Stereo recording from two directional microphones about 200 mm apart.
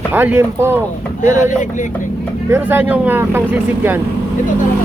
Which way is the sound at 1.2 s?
40° left (ahead or behind).